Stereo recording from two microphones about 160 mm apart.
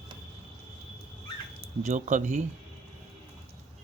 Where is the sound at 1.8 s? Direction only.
50° right (ahead or behind).